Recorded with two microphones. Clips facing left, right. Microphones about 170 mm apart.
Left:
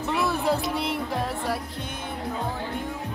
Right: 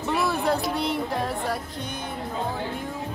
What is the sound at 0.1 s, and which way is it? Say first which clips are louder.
Music: right 1 dB; centre (ahead or behind).